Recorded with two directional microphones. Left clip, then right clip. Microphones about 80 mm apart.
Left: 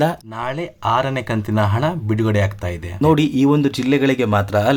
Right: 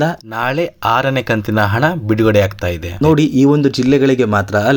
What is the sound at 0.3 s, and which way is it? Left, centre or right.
Speech, right.